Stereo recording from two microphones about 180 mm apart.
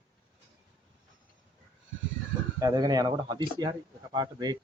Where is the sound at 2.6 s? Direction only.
20° right (ahead or behind).